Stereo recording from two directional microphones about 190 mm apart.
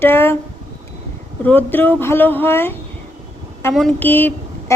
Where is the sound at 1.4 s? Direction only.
10° left (ahead or behind).